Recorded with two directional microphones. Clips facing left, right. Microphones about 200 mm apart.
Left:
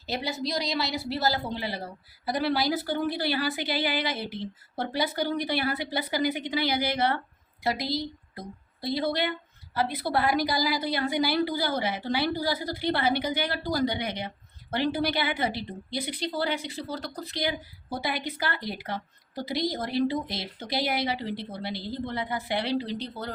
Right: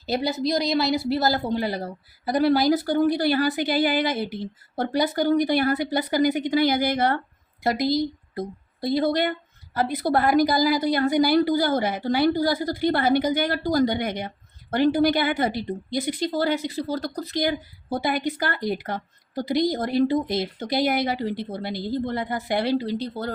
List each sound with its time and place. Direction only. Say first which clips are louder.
0.0 s a woman's voice: right 7 dB; 40° right (ahead or behind)